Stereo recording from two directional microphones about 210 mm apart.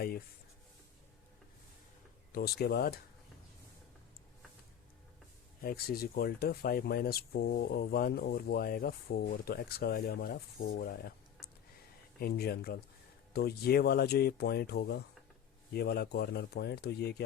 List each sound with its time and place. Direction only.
2.3 s speech: 50° left (ahead or behind)
5.6 s speech: 45° left (ahead or behind)
10.8 s a sound: 45° left (ahead or behind)
12.2 s speech: 45° left (ahead or behind)